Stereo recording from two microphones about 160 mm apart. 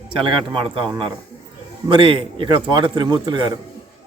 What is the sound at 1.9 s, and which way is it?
A man's voice, 30° right (ahead or behind).